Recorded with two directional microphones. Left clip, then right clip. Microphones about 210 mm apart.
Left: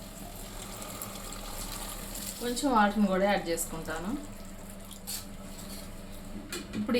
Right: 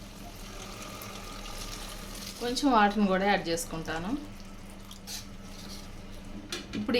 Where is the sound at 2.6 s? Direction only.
40° right (ahead or behind).